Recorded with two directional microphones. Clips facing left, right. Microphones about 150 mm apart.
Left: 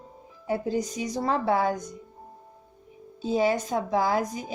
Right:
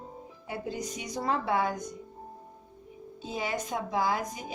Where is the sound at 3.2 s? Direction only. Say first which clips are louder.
Left 9 dB; 35° left (ahead or behind).